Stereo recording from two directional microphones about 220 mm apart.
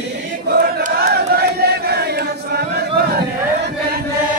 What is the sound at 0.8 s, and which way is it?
Chant, 45° right (ahead or behind).